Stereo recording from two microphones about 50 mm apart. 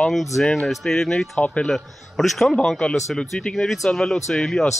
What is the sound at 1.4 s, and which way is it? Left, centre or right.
Speech, left.